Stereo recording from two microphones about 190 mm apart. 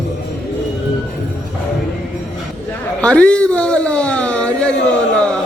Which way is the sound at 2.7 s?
5° left (ahead or behind).